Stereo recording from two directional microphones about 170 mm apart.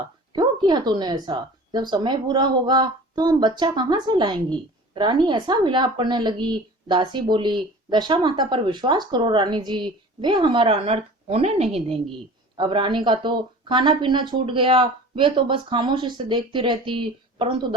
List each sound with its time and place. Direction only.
0.3 s speech: 25° right (ahead or behind)